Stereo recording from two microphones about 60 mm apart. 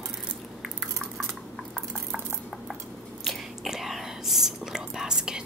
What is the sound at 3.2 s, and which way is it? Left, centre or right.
Whispering, centre.